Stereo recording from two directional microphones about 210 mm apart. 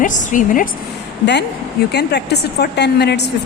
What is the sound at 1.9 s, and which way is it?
A woman's voice, 50° left (ahead or behind).